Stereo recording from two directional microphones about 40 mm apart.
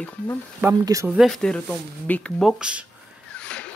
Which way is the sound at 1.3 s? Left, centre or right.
Centre.